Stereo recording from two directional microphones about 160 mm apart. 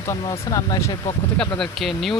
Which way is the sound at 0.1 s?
25° left (ahead or behind).